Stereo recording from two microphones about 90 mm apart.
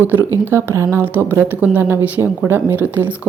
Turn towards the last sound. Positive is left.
turn(degrees=-20)  # may be behind; listen again after turning